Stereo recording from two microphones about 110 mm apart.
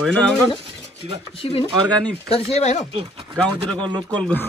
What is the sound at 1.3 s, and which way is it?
Speech, 55° left (ahead or behind).